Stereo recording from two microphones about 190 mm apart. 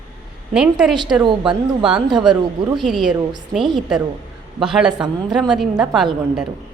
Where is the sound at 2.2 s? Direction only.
5° right (ahead or behind).